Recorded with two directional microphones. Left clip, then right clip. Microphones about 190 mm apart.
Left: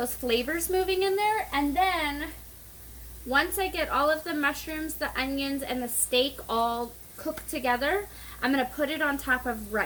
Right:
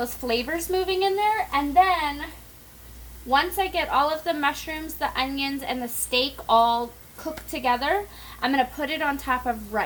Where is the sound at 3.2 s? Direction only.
15° right (ahead or behind).